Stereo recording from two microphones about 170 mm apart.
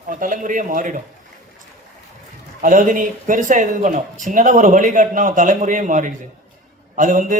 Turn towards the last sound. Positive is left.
turn(degrees=-50)  # may be behind; listen again after turning